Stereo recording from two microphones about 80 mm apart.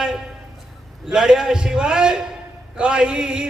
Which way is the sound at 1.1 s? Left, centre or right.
Centre.